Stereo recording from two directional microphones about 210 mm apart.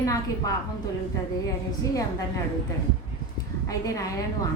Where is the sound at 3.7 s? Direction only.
15° left (ahead or behind).